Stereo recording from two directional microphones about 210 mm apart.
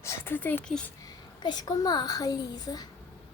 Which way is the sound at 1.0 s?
20° left (ahead or behind).